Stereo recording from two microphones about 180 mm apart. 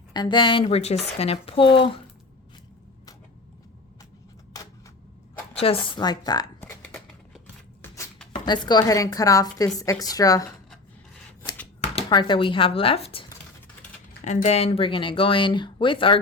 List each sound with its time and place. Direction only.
0.1 s a woman's voice: 25° left (ahead or behind)
5.5 s a woman's voice: 30° left (ahead or behind)
6.6 s a sound: 10° left (ahead or behind)
8.4 s a woman's voice: 25° left (ahead or behind)
11.8 s speech: 30° left (ahead or behind)
14.3 s a woman's voice: 40° left (ahead or behind)